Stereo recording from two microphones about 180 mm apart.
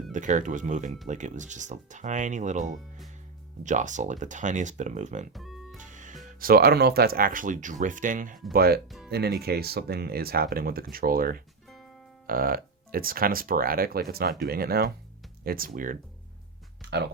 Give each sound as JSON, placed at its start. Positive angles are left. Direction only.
{"t": 0.1, "sound": "speech", "side_deg": -45}
{"t": 5.3, "sound": "music", "side_deg": 0}
{"t": 5.8, "sound": "music", "side_deg": -45}
{"t": 6.4, "sound": "speech", "side_deg": -55}
{"t": 8.5, "sound": "speech", "side_deg": -60}
{"t": 16.8, "sound": "a sound", "side_deg": -70}